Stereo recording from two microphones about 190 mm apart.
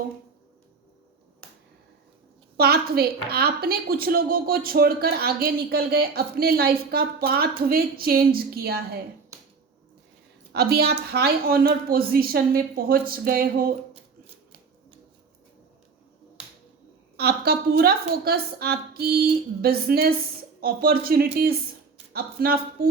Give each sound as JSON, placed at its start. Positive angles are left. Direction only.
{"t": 2.6, "sound": "a woman's voice", "side_deg": -55}
{"t": 10.5, "sound": "a woman's voice", "side_deg": -55}
{"t": 17.2, "sound": "a woman's voice", "side_deg": -55}